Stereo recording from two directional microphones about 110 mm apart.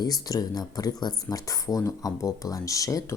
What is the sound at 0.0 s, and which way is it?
Speech, 35° left (ahead or behind).